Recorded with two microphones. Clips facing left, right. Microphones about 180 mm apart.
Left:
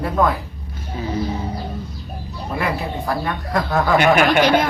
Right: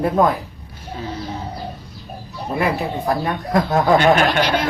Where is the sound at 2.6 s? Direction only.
20° right (ahead or behind).